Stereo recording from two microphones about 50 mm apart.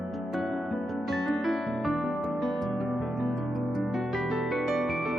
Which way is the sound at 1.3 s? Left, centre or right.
Centre.